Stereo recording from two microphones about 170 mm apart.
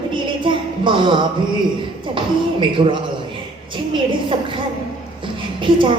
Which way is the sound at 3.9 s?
30° right (ahead or behind).